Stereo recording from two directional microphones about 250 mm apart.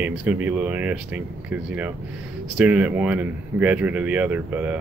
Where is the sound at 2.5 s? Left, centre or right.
Centre.